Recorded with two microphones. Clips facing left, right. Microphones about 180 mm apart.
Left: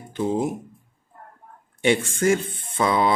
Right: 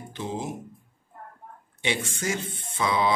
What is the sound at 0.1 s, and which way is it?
Speech, 50° left (ahead or behind).